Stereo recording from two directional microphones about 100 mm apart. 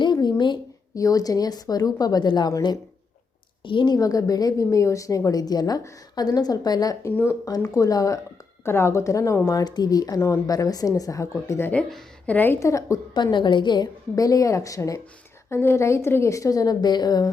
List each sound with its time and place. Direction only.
0.0 s a sound: 45° left (ahead or behind)
0.9 s speech: 35° left (ahead or behind)
3.6 s a woman's voice: 55° left (ahead or behind)
3.9 s speech: 35° left (ahead or behind)
7.0 s a woman's voice: 25° left (ahead or behind)
7.4 s a woman's voice: 40° left (ahead or behind)
12.2 s a woman's voice: 15° left (ahead or behind)
12.5 s speech: 30° left (ahead or behind)
13.3 s a woman's voice: 50° left (ahead or behind)